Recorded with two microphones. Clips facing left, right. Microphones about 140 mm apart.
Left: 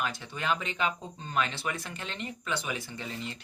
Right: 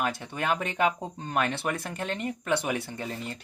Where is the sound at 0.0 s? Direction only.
50° right (ahead or behind).